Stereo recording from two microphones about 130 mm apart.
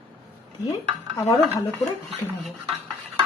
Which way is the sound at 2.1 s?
Centre (ahead or behind).